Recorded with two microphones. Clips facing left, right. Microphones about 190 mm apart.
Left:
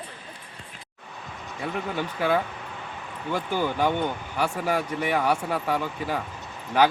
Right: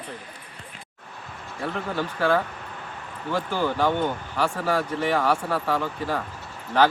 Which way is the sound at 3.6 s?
15° left (ahead or behind).